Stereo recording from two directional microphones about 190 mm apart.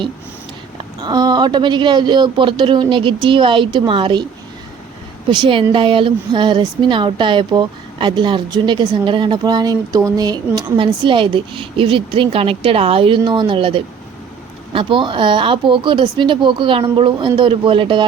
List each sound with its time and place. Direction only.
1.0 s speech: 20° right (ahead or behind)
5.3 s speech: 25° right (ahead or behind)